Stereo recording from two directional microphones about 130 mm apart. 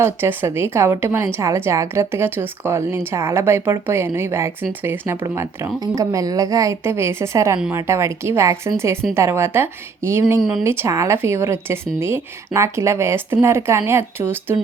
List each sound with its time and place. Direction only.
0.0 s a woman's voice: 20° right (ahead or behind)